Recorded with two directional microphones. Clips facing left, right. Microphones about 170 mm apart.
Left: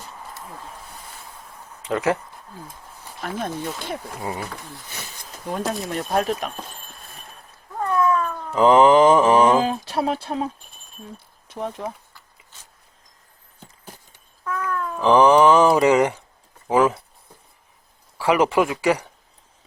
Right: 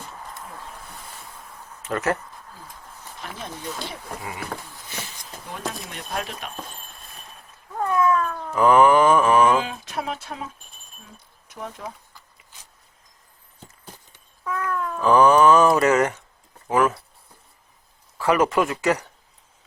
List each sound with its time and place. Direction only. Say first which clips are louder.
1.8 s speech: left 3 dB; 15° left (ahead or behind)
3.3 s speech: left 6 dB; 50° left (ahead or behind)
5.5 s speech: left 8 dB; 45° left (ahead or behind)
7.8 s cat: even; 5° right (ahead or behind)
8.5 s mantra: left 2 dB; 20° left (ahead or behind)
9.6 s speech: left 6 dB; 35° left (ahead or behind)
14.4 s cat: even; 5° right (ahead or behind)
14.8 s a sound: left 1 dB; 10° left (ahead or behind)
15.7 s speech: left 2 dB; 15° left (ahead or behind)
16.6 s mantra: left 2 dB; 20° left (ahead or behind)
18.2 s speech: left 2 dB; 10° left (ahead or behind)